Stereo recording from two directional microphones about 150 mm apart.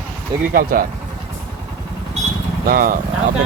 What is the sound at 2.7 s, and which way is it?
Speech, 65° right (ahead or behind).